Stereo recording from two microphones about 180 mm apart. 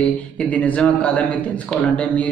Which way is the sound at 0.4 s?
5° left (ahead or behind).